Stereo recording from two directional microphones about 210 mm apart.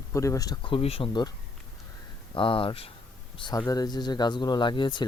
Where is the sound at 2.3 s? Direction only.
25° left (ahead or behind).